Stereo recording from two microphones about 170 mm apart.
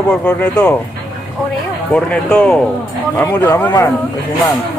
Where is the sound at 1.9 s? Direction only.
5° left (ahead or behind).